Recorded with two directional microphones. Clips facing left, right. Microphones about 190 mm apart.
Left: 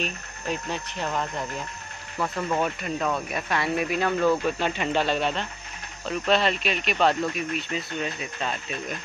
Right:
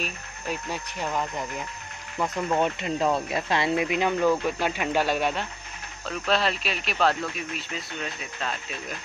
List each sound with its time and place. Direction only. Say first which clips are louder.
0.0 s speech: left 2 dB; 10° right (ahead or behind)